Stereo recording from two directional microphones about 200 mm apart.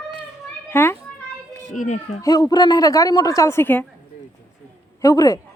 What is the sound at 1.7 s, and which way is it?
Speech, 35° left (ahead or behind).